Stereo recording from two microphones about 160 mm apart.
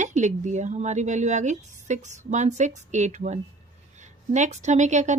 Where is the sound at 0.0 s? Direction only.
50° right (ahead or behind).